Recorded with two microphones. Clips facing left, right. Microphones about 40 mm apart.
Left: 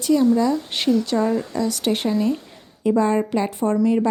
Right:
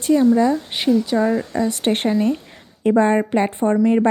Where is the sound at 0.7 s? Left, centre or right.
Centre.